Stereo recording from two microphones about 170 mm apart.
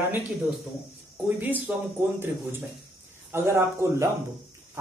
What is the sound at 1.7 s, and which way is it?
Speech, 5° right (ahead or behind).